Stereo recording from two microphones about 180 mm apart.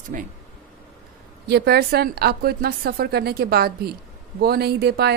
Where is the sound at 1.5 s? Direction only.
60° right (ahead or behind).